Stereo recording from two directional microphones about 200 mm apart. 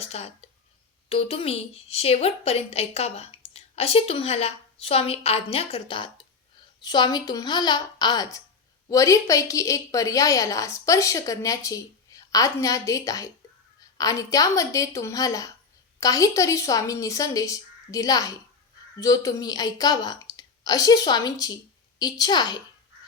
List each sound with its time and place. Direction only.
0.0 s a woman's voice: 30° left (ahead or behind)